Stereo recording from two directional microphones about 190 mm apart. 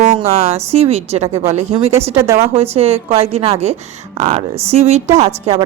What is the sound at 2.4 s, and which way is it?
Speech, 30° right (ahead or behind).